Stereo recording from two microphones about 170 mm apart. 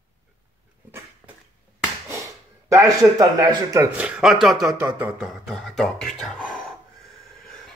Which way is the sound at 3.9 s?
5° right (ahead or behind).